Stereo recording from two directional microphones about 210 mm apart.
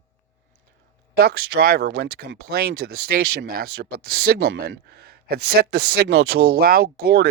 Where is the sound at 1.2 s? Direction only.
45° right (ahead or behind).